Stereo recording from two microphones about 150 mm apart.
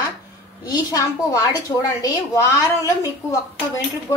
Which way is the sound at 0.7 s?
25° left (ahead or behind).